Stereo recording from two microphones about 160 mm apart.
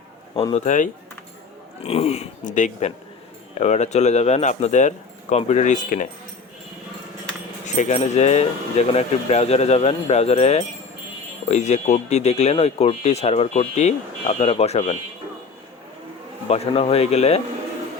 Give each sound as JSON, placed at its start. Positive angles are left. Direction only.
{"t": 0.5, "sound": "speech", "side_deg": 50}
{"t": 1.8, "sound": "speech", "side_deg": 40}
{"t": 7.6, "sound": "speech", "side_deg": 50}
{"t": 16.5, "sound": "speech", "side_deg": 40}